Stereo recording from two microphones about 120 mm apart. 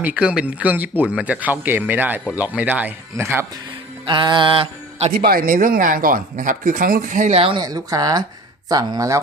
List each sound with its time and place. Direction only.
0.0 s speech: 10° right (ahead or behind)
4.0 s music: 40° right (ahead or behind)
5.6 s speech: 90° right
7.4 s speech: 35° right (ahead or behind)